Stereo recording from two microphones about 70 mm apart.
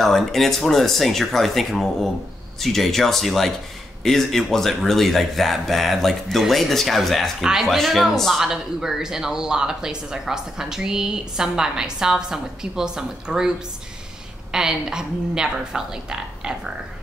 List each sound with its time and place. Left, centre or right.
0.0 s speech: centre